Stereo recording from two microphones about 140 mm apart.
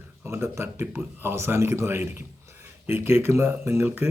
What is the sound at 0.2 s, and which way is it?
A man's voice, 15° right (ahead or behind).